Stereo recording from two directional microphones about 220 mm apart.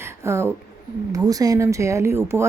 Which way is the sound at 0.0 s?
10° right (ahead or behind).